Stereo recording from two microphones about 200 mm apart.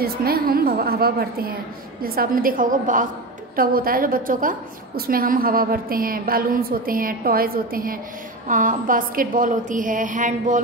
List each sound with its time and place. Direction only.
0.0 s a woman's voice: 50° right (ahead or behind)